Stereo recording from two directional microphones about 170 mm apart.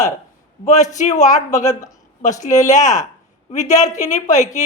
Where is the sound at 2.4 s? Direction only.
45° left (ahead or behind).